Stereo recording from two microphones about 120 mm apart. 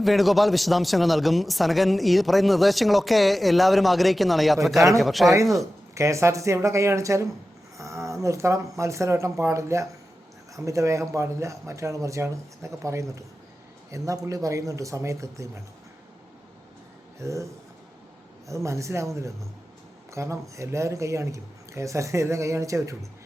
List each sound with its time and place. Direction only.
0.0 s speech: centre (ahead or behind)
5.9 s speech: 25° right (ahead or behind)
17.2 s speech: 25° right (ahead or behind)